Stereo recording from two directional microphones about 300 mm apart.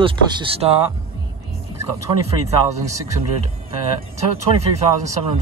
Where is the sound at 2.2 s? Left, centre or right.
Centre.